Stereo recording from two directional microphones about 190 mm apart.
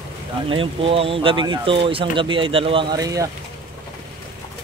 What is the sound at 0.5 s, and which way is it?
Speech, 30° right (ahead or behind).